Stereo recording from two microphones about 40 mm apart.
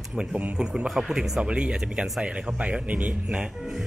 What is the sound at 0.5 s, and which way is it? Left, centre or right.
Speech, right.